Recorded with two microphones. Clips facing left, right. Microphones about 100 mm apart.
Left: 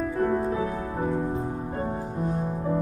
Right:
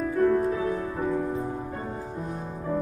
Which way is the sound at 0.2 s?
25° left (ahead or behind).